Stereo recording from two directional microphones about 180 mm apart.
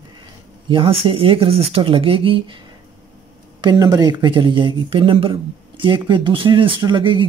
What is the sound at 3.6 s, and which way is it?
Speech, 20° right (ahead or behind).